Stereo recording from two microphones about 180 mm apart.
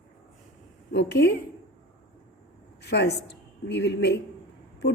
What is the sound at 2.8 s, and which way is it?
A woman's voice, 70° left (ahead or behind).